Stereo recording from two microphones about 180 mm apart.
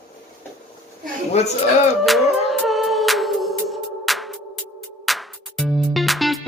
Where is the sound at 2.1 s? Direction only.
Centre (ahead or behind).